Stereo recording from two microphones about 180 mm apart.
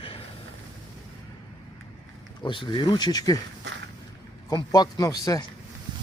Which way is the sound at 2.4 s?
25° left (ahead or behind).